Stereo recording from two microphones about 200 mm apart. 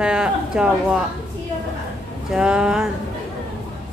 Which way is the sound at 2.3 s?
5° right (ahead or behind).